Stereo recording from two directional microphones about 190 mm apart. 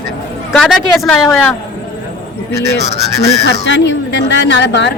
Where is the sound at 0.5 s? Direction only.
5° left (ahead or behind).